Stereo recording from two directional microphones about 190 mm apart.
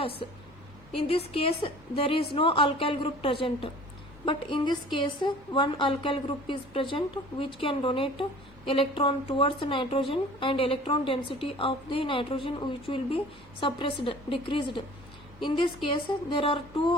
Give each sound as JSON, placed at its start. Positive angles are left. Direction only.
{"t": 0.0, "sound": "a woman's voice", "side_deg": 30}